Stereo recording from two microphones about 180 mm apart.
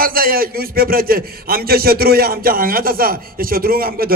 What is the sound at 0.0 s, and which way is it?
A man's voice, 55° right (ahead or behind).